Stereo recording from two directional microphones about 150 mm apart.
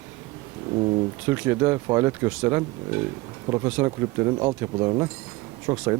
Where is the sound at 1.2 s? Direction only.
15° right (ahead or behind).